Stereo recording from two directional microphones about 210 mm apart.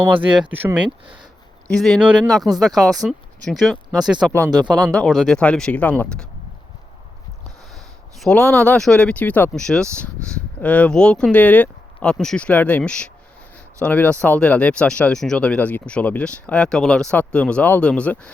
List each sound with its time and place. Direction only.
0.1 s speech: 25° right (ahead or behind)
0.5 s speech: 10° right (ahead or behind)
7.7 s speech: centre (ahead or behind)